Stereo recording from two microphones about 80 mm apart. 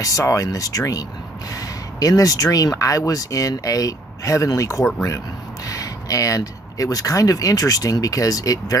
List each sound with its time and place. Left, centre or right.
0.0 s speech: left